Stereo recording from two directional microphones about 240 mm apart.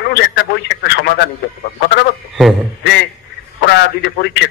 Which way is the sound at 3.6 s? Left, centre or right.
Left.